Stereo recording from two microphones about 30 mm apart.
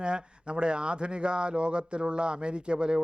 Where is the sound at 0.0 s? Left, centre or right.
Right.